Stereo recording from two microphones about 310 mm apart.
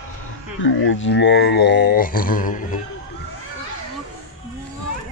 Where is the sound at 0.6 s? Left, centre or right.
Left.